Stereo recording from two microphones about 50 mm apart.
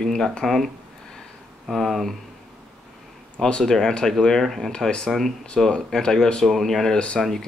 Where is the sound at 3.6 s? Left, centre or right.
Centre.